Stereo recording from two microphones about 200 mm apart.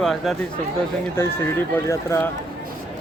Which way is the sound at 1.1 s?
10° left (ahead or behind).